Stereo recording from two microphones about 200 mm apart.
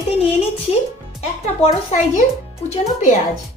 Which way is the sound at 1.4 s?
35° left (ahead or behind).